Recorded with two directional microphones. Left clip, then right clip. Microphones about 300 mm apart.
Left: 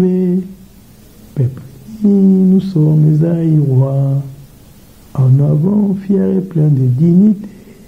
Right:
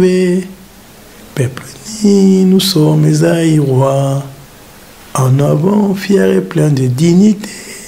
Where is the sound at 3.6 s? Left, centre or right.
Right.